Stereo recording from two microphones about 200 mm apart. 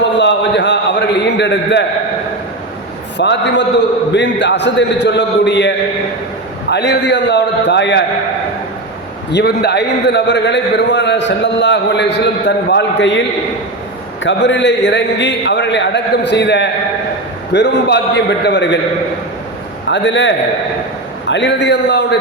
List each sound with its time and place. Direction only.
0.2 s a sound: 60° left (ahead or behind)
3.2 s a man's voice: 60° left (ahead or behind)
9.3 s a man's voice: 55° left (ahead or behind)
14.3 s a man's voice: 65° left (ahead or behind)
19.9 s a man's voice: 65° left (ahead or behind)